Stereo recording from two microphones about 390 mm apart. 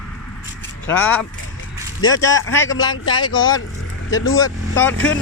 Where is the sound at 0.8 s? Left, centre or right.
Centre.